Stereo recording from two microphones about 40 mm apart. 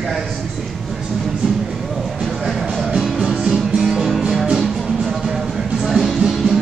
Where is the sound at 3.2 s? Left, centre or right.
Centre.